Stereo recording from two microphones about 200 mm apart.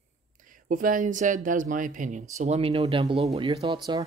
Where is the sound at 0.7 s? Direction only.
45° right (ahead or behind).